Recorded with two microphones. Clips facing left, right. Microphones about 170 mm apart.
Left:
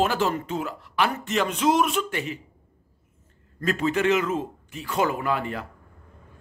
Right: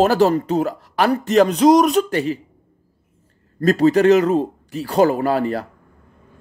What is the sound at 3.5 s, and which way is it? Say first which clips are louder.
A man's voice: right 10 dB; 35° right (ahead or behind).